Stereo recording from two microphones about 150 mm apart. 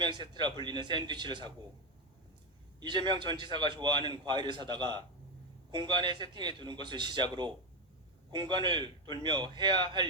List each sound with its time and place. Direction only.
0.6 s a man's voice: 30° right (ahead or behind)
2.8 s a man's voice: 30° right (ahead or behind)